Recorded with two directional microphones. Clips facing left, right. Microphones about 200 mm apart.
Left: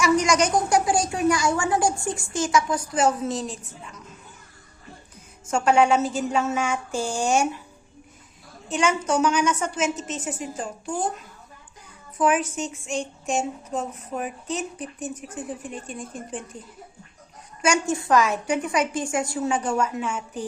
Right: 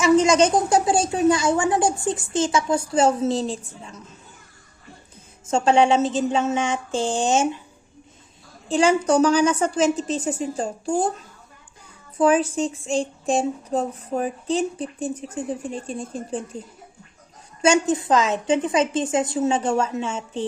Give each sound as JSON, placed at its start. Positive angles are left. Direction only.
{"t": 0.0, "sound": "speech", "side_deg": -25}
{"t": 5.5, "sound": "speech", "side_deg": -25}
{"t": 8.7, "sound": "child singing", "side_deg": -30}
{"t": 17.6, "sound": "speech", "side_deg": -20}